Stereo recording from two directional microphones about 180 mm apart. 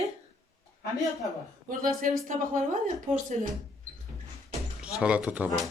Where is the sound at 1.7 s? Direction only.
50° right (ahead or behind).